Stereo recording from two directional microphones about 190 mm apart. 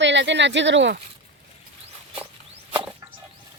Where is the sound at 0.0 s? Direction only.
70° right (ahead or behind).